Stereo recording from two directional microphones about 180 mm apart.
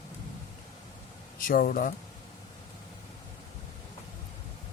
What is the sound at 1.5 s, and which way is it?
Speech, 50° left (ahead or behind).